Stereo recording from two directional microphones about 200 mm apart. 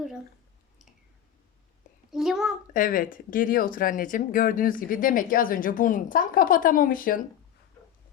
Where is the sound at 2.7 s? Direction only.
40° left (ahead or behind).